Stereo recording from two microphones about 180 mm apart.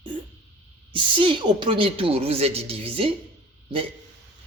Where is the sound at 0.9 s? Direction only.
30° right (ahead or behind).